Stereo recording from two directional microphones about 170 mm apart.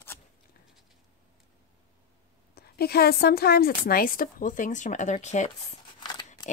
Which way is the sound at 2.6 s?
70° left (ahead or behind).